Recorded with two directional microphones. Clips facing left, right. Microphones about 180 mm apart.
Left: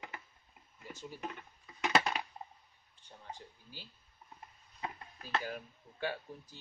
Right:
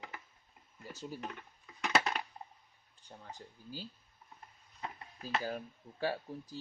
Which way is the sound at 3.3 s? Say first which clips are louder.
Right 1 dB; 40° right (ahead or behind).